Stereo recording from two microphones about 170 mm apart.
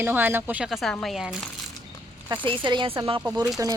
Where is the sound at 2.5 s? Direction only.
30° right (ahead or behind).